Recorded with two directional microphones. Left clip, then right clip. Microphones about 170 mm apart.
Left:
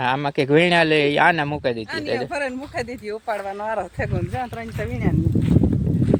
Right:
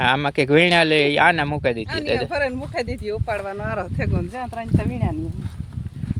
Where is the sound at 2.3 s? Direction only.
65° right (ahead or behind); by 5.0 s 90° right.